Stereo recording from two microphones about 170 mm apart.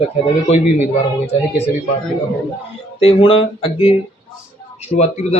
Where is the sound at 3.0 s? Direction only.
35° left (ahead or behind).